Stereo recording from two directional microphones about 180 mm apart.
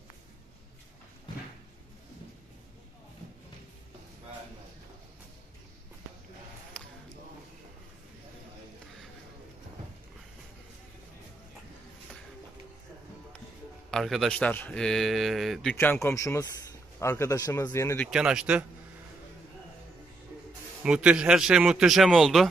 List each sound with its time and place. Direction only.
13.8 s speech: centre (ahead or behind)
18.1 s speech: 5° right (ahead or behind)
20.8 s speech: 5° right (ahead or behind)